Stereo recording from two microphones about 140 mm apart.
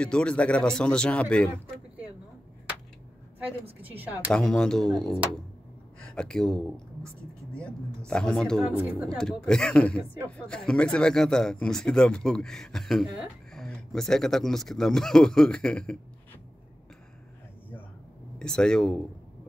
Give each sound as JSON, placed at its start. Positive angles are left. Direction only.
{"t": 0.0, "sound": "speech", "side_deg": 5}
{"t": 3.8, "sound": "speech", "side_deg": -10}
{"t": 4.3, "sound": "speech", "side_deg": 5}
{"t": 8.1, "sound": "speech", "side_deg": 5}
{"t": 18.4, "sound": "speech", "side_deg": 5}